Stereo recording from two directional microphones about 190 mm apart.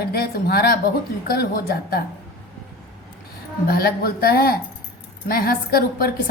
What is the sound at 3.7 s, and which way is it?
Speech, 55° left (ahead or behind).